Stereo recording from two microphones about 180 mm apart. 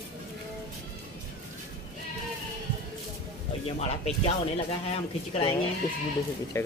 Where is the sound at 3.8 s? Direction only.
35° left (ahead or behind).